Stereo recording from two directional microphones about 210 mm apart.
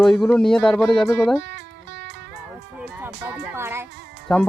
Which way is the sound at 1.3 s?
55° right (ahead or behind).